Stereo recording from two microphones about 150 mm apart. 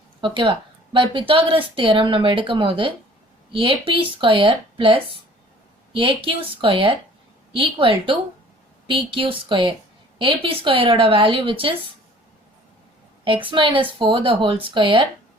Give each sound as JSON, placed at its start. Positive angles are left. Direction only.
{"t": 0.2, "sound": "speech", "side_deg": -35}
{"t": 13.2, "sound": "speech", "side_deg": -35}